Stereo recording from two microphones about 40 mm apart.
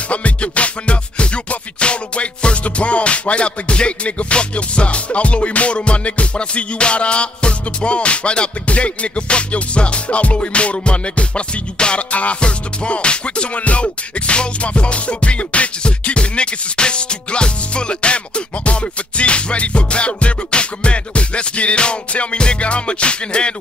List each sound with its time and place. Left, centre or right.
0.1 s music: left